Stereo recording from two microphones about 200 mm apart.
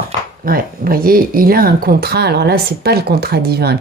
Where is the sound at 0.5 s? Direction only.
45° right (ahead or behind).